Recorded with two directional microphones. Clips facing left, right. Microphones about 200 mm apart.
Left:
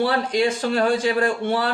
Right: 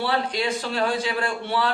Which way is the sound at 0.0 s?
45° left (ahead or behind).